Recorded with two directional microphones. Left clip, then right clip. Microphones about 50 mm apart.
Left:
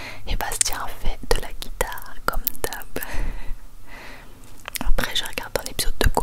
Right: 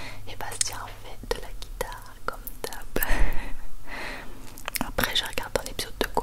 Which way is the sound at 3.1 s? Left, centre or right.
Right.